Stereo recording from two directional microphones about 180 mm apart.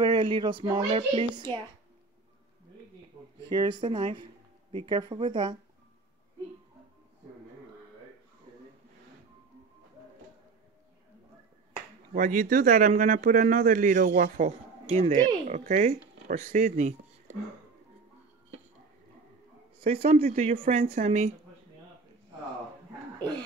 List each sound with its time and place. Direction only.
0.0 s speech: 25° right (ahead or behind)
3.4 s speech: 25° right (ahead or behind)
11.7 s speech: 45° right (ahead or behind)
19.8 s a man's voice: 30° right (ahead or behind)
20.8 s speech: 50° right (ahead or behind)